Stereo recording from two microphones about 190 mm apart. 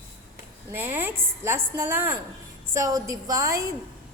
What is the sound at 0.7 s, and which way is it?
A woman's voice, 10° right (ahead or behind).